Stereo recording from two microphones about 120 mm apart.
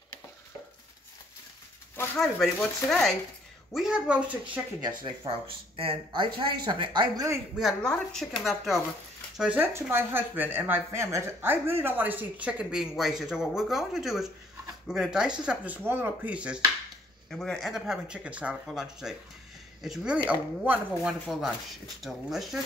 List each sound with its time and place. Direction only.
2.1 s speech: 5° left (ahead or behind)
4.8 s speech: 40° right (ahead or behind)
7.5 s speech: 5° left (ahead or behind)
17.3 s speech: 5° left (ahead or behind); by 20.8 s 15° right (ahead or behind)
21.0 s speech: centre (ahead or behind)